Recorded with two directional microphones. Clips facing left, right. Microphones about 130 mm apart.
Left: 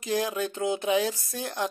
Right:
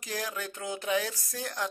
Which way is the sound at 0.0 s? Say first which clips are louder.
Left 8 dB; 20° left (ahead or behind).